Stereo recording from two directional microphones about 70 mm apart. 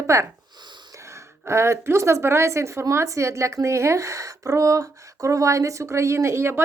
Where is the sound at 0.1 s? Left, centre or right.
Right.